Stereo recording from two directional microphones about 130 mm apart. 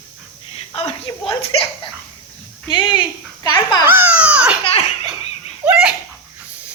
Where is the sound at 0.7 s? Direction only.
45° left (ahead or behind).